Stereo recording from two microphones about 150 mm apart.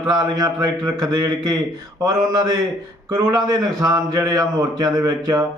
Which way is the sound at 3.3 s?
25° right (ahead or behind).